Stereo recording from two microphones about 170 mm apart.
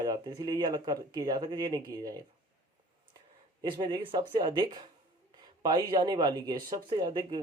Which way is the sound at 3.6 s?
25° right (ahead or behind).